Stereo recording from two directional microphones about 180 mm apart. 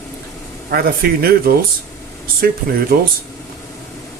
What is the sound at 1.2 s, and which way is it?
Speech, 55° right (ahead or behind).